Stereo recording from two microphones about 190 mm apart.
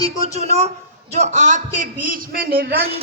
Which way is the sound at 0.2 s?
35° right (ahead or behind).